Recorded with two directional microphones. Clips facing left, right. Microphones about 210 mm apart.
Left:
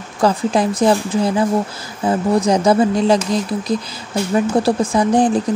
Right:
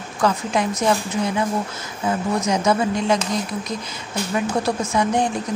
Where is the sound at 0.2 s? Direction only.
35° left (ahead or behind).